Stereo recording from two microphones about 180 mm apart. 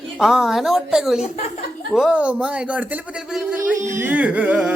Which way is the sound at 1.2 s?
35° left (ahead or behind).